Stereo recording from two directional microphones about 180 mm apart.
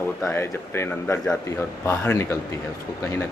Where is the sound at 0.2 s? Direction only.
15° left (ahead or behind).